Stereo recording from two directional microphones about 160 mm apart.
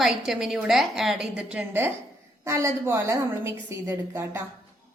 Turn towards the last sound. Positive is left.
turn(degrees=-15)  # may be behind; listen again after turning